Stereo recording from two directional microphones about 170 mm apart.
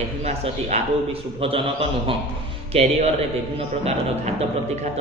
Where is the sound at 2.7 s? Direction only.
40° right (ahead or behind).